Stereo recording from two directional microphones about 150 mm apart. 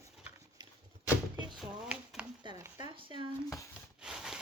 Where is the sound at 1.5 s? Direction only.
5° right (ahead or behind).